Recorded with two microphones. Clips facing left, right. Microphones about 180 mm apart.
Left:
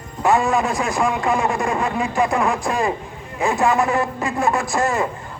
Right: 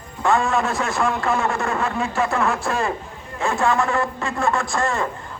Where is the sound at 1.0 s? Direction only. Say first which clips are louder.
Left 2 dB; 15° left (ahead or behind).